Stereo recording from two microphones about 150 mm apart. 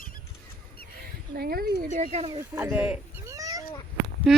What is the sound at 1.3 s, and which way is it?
Speech, 90° right.